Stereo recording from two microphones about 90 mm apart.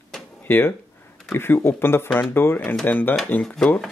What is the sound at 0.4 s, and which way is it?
Speech, 25° left (ahead or behind).